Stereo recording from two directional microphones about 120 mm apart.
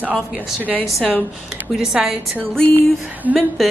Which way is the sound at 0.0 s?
10° right (ahead or behind).